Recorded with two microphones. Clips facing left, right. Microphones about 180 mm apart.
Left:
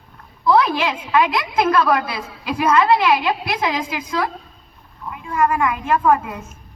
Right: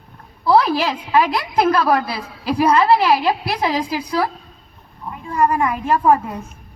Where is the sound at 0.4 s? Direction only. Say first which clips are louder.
Right 1 dB; 35° right (ahead or behind).